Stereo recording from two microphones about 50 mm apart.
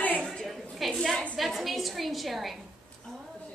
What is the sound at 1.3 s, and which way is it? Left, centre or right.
A woman's voice, centre.